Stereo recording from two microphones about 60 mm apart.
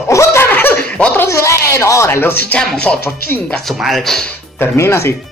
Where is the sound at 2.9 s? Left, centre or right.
Left.